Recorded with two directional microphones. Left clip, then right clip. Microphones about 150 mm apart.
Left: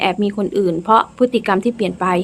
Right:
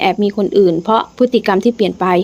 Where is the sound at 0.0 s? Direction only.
30° right (ahead or behind).